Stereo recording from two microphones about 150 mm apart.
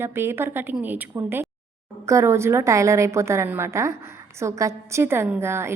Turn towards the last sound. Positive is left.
turn(degrees=-15)  # may be behind; listen again after turning